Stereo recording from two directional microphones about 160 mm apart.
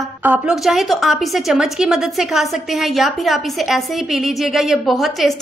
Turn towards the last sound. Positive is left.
turn(degrees=0)  # may be behind; listen again after turning